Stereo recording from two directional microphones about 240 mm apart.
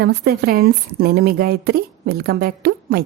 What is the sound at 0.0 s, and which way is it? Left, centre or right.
A woman's voice, right.